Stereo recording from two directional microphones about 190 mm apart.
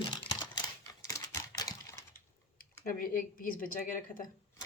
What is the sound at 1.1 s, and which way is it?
Typing, 15° left (ahead or behind).